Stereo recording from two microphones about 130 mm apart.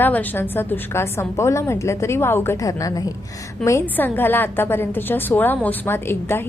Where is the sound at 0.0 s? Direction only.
15° left (ahead or behind).